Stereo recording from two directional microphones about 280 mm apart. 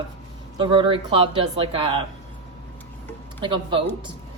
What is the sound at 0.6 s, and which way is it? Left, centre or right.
A woman's voice, centre.